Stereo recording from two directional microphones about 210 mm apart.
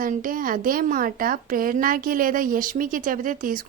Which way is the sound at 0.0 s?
40° right (ahead or behind).